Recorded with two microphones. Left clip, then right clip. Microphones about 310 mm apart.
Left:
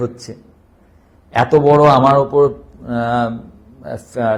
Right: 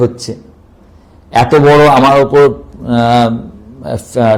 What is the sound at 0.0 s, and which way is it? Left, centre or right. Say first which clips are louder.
A man's voice: right 10 dB; right.